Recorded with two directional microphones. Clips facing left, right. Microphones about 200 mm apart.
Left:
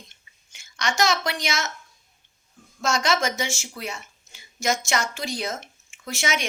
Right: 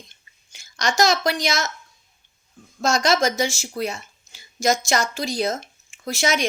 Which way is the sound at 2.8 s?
35° right (ahead or behind).